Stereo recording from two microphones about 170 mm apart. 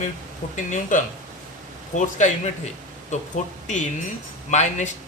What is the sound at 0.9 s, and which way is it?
A man's voice, 50° left (ahead or behind).